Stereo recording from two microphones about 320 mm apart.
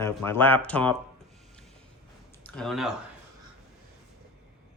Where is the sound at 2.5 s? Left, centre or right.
Centre.